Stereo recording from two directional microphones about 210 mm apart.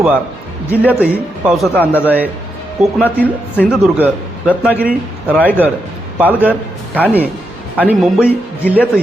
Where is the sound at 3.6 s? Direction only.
5° right (ahead or behind).